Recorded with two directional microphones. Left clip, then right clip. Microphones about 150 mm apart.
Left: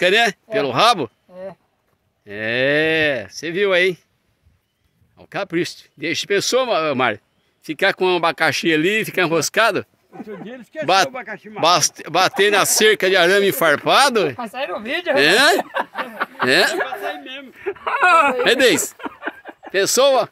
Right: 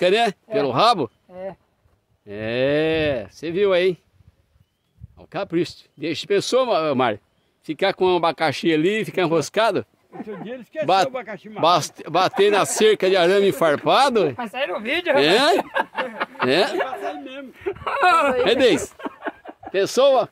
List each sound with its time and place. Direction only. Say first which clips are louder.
0.0 s speech: left 3 dB; 10° right (ahead or behind)
5.1 s speech: left 1 dB; centre (ahead or behind)
7.6 s speech: left 2 dB; centre (ahead or behind)
11.6 s speech: left 2 dB; 10° right (ahead or behind)
15.1 s speech: left 3 dB; 5° right (ahead or behind)
17.2 s speech: left 1 dB; 90° right
18.4 s speech: left 2 dB; centre (ahead or behind)
18.9 s a sound: left 2 dB; 90° right
19.7 s speech: left 2 dB; 5° left (ahead or behind)